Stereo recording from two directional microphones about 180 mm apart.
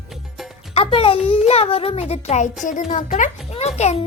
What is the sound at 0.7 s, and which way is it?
Speech, 30° left (ahead or behind).